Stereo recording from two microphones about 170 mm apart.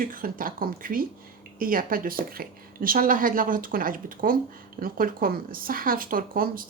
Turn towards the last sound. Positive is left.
turn(degrees=-55)  # may be behind; listen again after turning